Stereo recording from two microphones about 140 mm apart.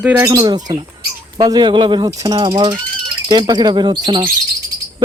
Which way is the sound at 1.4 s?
30° right (ahead or behind).